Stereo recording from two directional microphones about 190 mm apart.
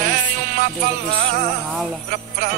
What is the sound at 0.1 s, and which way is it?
Music, 50° right (ahead or behind).